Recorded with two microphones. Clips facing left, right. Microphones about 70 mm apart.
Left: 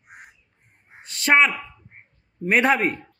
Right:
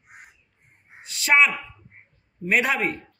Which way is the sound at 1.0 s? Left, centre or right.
Left.